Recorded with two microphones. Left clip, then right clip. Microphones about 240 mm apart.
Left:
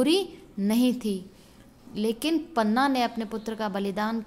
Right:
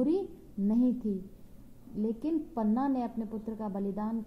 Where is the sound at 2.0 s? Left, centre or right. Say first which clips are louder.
Left 6 dB; left.